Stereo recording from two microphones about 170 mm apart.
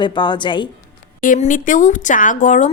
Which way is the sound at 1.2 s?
50° left (ahead or behind).